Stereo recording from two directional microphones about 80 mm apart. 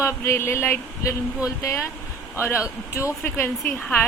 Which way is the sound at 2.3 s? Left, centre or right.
Left.